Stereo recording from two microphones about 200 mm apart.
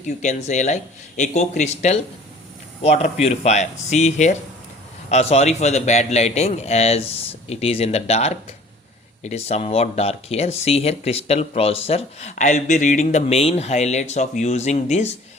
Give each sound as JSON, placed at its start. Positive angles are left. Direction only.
{"t": 0.2, "sound": "speech", "side_deg": 35}